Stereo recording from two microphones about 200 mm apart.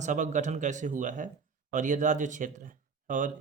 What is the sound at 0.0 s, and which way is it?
Speech, 35° right (ahead or behind).